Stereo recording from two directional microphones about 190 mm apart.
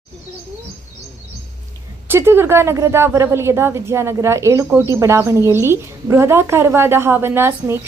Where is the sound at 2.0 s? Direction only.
10° right (ahead or behind).